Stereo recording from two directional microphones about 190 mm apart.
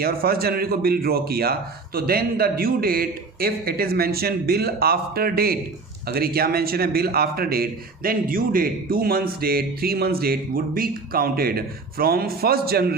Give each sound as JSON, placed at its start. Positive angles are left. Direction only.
{"t": 0.0, "sound": "a man's voice", "side_deg": -50}